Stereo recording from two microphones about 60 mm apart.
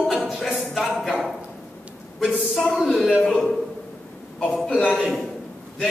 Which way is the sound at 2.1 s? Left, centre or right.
Centre.